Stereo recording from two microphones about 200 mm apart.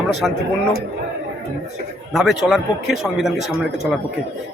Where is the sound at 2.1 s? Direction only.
Centre (ahead or behind).